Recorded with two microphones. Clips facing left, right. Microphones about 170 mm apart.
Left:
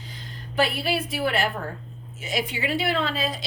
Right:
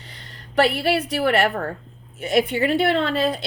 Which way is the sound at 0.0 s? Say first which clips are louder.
Left 3 dB; 70° right (ahead or behind).